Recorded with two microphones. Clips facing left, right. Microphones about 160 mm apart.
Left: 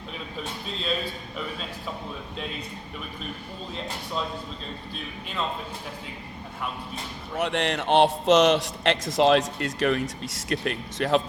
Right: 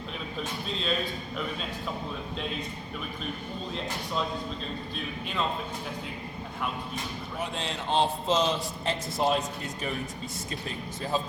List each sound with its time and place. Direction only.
7.3 s speech: 75° left (ahead or behind)